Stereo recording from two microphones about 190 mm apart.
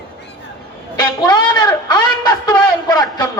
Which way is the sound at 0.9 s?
20° left (ahead or behind).